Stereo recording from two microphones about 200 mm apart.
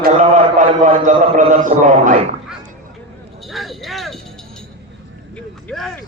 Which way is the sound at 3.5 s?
Centre (ahead or behind).